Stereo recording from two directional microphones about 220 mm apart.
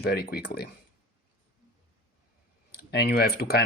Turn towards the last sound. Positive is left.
turn(degrees=45)  # may be behind; listen again after turning